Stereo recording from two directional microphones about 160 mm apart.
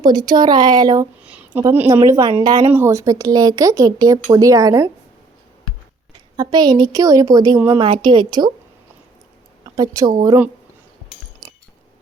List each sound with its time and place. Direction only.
0.0 s speech: 25° right (ahead or behind)
1.2 s a sound: 10° right (ahead or behind)
1.6 s a woman's voice: 15° right (ahead or behind)
6.3 s speech: 25° right (ahead or behind)
9.6 s speech: 20° right (ahead or behind)